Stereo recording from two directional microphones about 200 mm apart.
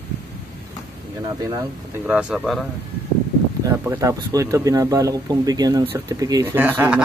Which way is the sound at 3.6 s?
15° right (ahead or behind).